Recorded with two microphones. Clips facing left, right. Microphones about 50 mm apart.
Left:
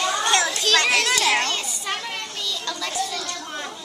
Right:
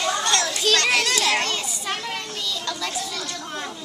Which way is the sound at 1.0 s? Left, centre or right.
Centre.